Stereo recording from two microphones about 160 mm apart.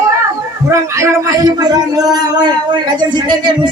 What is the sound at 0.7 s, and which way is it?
Speech, 20° right (ahead or behind).